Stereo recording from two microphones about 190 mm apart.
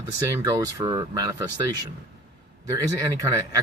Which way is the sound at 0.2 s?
15° right (ahead or behind).